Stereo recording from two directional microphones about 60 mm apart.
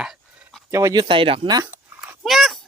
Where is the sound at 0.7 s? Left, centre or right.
Right.